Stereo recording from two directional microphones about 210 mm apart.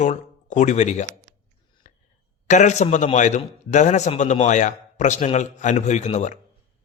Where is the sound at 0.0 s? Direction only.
35° left (ahead or behind).